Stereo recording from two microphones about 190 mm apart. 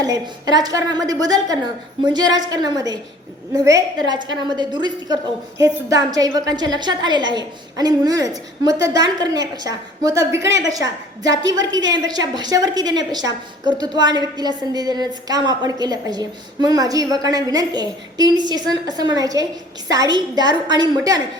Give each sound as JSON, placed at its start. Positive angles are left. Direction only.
{"t": 0.0, "sound": "a woman's voice", "side_deg": -20}